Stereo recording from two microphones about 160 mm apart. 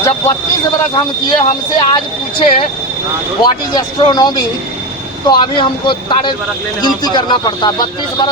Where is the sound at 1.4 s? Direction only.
30° left (ahead or behind).